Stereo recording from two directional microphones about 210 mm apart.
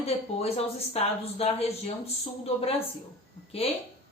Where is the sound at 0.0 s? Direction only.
30° left (ahead or behind).